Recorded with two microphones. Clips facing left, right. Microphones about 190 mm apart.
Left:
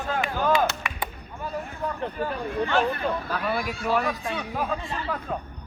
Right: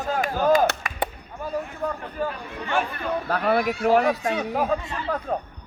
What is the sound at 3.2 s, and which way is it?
Speech, 65° right (ahead or behind).